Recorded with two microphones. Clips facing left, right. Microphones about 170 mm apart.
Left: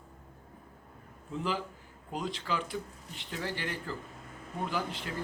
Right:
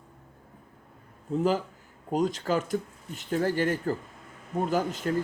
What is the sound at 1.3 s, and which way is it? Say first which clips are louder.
Speech: right 9 dB; 45° right (ahead or behind).